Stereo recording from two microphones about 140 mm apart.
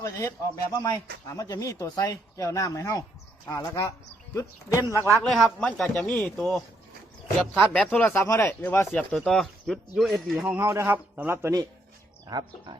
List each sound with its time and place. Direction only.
0.0 s speech: 20° left (ahead or behind)
4.9 s speech: 20° right (ahead or behind)
5.2 s speech: 5° left (ahead or behind)
9.1 s speech: 5° left (ahead or behind)
10.4 s a man's voice: 15° right (ahead or behind)
12.3 s speech: 30° right (ahead or behind)